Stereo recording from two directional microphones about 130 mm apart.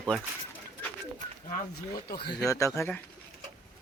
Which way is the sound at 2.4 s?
25° left (ahead or behind).